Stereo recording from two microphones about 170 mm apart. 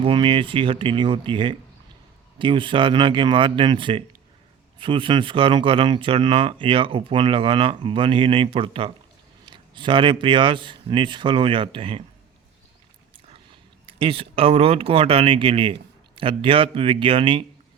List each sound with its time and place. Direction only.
0.0 s speech: 30° right (ahead or behind)
13.8 s speech: 35° right (ahead or behind)